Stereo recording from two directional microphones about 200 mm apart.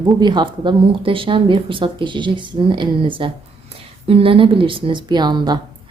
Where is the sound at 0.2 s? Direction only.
20° right (ahead or behind).